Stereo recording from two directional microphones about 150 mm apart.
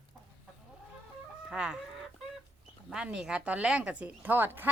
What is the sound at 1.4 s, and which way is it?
Chicken, 5° right (ahead or behind).